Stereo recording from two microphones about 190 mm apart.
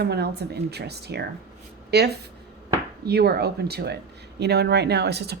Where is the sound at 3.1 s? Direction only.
55° right (ahead or behind).